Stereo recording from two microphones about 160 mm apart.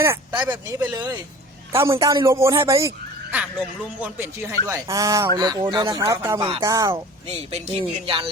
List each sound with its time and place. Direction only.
0.0 s speech: 15° right (ahead or behind)
0.9 s speech: 25° right (ahead or behind)
4.0 s speech: 15° right (ahead or behind); by 6.0 s 30° right (ahead or behind)
6.0 s speech: 15° right (ahead or behind)
6.4 s speech: 30° right (ahead or behind)
6.7 s speech: 20° right (ahead or behind)
7.3 s speech: 40° right (ahead or behind)